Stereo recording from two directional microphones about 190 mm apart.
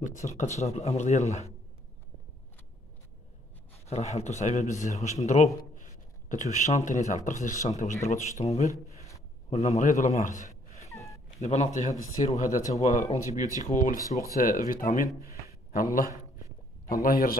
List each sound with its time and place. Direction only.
0.0 s speech: 40° left (ahead or behind)
3.8 s speech: 35° left (ahead or behind)
13.9 s speech: 15° right (ahead or behind)
14.4 s speech: 45° left (ahead or behind)